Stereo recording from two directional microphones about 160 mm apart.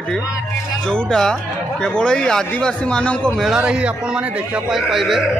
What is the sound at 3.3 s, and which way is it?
Speech, 5° right (ahead or behind).